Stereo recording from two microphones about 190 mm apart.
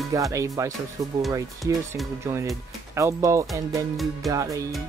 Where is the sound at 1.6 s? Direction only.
Centre (ahead or behind).